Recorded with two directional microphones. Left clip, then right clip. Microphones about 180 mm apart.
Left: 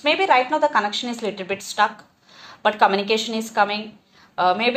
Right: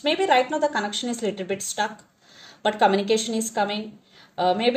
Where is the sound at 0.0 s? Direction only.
50° right (ahead or behind).